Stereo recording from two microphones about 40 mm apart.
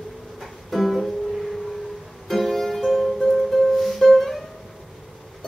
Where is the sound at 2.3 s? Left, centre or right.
Centre.